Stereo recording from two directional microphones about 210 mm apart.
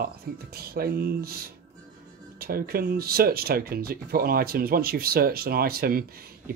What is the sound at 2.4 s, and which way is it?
Speech, 45° right (ahead or behind).